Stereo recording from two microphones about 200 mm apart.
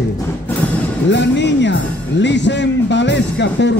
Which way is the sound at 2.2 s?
60° left (ahead or behind).